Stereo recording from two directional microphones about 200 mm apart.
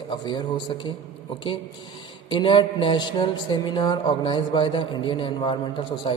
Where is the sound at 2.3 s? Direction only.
25° left (ahead or behind).